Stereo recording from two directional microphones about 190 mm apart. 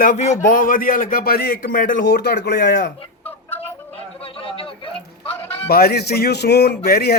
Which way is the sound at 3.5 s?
10° left (ahead or behind).